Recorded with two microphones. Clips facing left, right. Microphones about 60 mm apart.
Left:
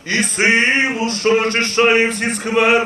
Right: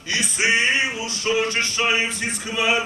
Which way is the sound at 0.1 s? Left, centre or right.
Left.